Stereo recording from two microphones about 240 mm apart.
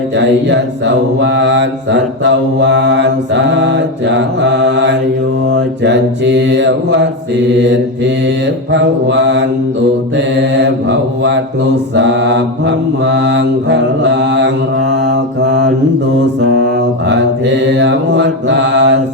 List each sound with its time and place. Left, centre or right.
0.2 s mantra: right
17.1 s mantra: right